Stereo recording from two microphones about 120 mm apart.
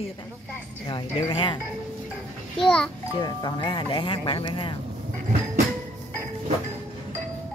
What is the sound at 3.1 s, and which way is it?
Speech, 35° left (ahead or behind).